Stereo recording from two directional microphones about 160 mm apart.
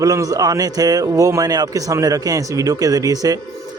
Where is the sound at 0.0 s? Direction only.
20° right (ahead or behind).